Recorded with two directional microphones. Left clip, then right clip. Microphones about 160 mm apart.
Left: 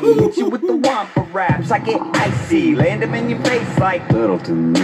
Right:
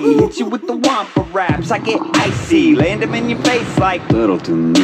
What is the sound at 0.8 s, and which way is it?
Music, 20° right (ahead or behind).